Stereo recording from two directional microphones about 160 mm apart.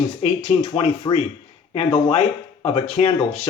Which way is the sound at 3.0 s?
45° left (ahead or behind).